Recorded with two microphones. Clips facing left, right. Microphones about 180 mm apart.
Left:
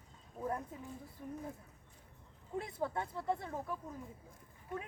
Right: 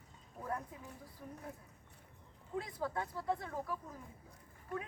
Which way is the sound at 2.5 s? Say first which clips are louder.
Left 1 dB; 25° left (ahead or behind).